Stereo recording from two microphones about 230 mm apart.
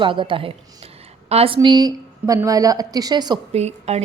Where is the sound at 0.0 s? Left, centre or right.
Right.